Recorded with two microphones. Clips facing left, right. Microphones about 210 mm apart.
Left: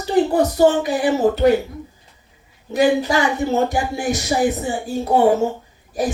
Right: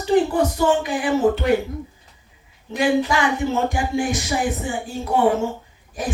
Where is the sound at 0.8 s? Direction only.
40° left (ahead or behind).